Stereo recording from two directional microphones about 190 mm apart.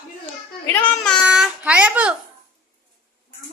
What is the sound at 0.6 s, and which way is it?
Child singing, 10° left (ahead or behind).